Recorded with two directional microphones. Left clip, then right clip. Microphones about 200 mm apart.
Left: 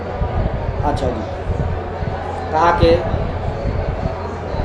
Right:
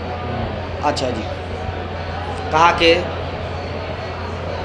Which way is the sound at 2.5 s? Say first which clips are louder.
Right 1 dB; 30° right (ahead or behind).